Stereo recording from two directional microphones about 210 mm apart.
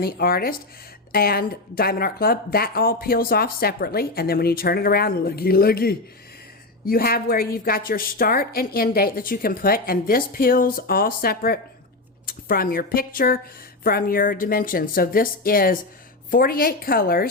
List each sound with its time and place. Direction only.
0.0 s speech: 45° left (ahead or behind)